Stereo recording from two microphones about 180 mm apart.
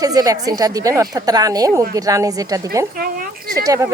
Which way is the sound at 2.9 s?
55° right (ahead or behind).